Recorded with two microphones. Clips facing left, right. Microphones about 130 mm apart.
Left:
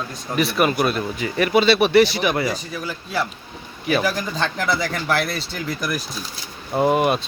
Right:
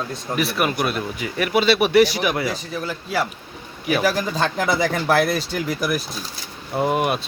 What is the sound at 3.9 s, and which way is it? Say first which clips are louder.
Speech: right 1 dB; 5° right (ahead or behind).